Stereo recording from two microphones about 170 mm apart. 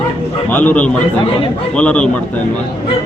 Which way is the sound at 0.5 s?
10° left (ahead or behind).